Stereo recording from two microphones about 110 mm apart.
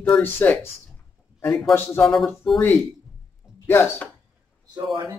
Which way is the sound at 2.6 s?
15° left (ahead or behind).